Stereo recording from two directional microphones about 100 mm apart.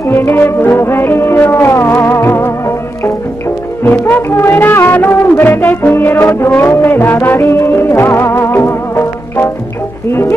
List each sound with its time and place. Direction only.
0.0 s music: 25° left (ahead or behind)